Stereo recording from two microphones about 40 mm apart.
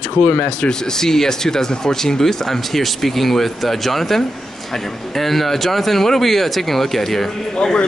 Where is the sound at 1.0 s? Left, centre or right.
Centre.